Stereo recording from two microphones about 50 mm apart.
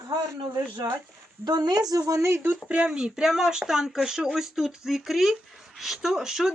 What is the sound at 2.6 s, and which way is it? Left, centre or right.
Speech, right.